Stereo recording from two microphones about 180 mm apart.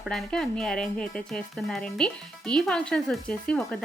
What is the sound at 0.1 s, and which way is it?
Speech, 5° left (ahead or behind).